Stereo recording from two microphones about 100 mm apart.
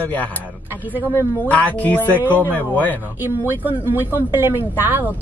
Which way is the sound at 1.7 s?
15° left (ahead or behind).